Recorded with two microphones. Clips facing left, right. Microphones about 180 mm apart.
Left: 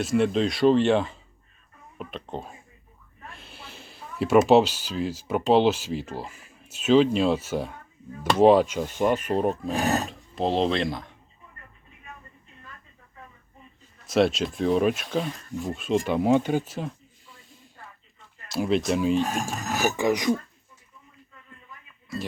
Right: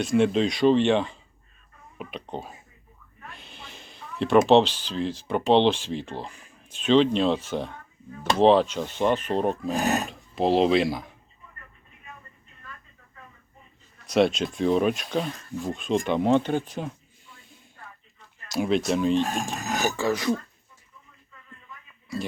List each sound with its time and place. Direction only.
0.0 s speech: centre (ahead or behind)
14.1 s speech: centre (ahead or behind)
18.4 s speech: centre (ahead or behind)
19.9 s speech: 15° left (ahead or behind)
22.1 s speech: centre (ahead or behind)